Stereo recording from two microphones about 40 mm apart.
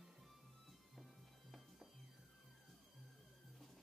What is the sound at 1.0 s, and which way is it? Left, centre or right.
Music, centre.